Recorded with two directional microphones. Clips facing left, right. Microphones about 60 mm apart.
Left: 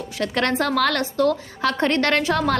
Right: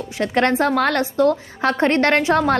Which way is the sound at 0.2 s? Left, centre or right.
Right.